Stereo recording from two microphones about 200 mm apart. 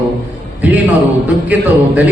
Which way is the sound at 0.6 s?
5° right (ahead or behind).